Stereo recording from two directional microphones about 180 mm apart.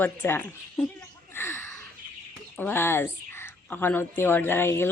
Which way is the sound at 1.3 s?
10° left (ahead or behind).